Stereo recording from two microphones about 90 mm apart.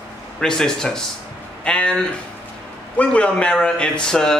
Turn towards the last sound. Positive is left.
turn(degrees=5)  # may be behind; listen again after turning